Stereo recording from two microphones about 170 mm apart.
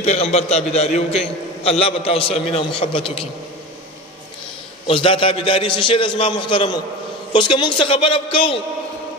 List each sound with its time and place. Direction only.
0.0 s a man's voice: 40° left (ahead or behind)
4.8 s a man's voice: 30° left (ahead or behind)